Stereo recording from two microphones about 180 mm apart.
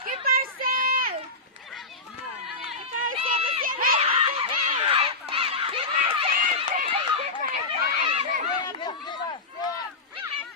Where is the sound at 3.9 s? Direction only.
30° right (ahead or behind).